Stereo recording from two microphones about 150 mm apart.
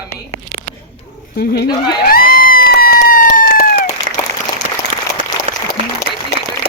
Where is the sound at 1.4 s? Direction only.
90° left.